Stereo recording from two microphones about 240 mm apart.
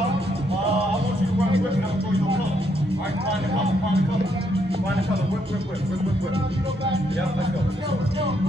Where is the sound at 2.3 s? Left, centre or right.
Right.